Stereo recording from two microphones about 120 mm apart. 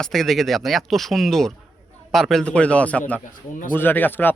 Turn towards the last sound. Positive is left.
turn(degrees=15)  # may be behind; listen again after turning